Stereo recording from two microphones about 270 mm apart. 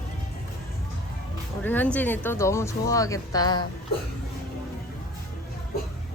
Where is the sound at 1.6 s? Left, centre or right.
Centre.